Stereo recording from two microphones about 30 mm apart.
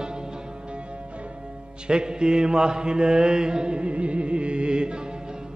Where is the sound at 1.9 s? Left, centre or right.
Right.